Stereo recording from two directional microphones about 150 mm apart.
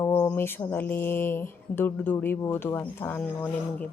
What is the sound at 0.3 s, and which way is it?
Speech, 15° left (ahead or behind).